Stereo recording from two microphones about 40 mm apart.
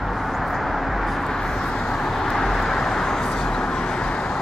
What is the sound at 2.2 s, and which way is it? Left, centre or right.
Vehicle, centre.